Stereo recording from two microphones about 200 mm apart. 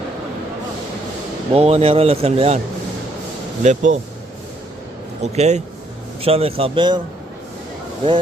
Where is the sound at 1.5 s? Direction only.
30° right (ahead or behind).